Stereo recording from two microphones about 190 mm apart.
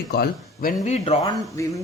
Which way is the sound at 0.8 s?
40° left (ahead or behind).